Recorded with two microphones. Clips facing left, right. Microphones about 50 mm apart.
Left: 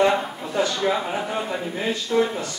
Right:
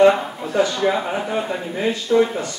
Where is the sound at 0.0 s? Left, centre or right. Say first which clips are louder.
Right 6 dB; centre.